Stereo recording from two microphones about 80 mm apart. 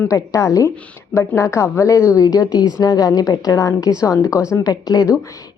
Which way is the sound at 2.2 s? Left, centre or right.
Left.